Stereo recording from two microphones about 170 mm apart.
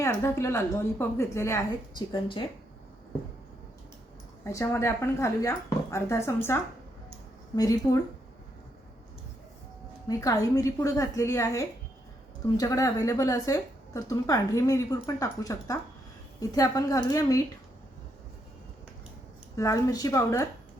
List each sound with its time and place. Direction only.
0.0 s speech: 15° left (ahead or behind)
4.4 s a woman's voice: 15° left (ahead or behind)
10.1 s a woman's voice: 20° left (ahead or behind)
19.5 s a woman's voice: 20° left (ahead or behind)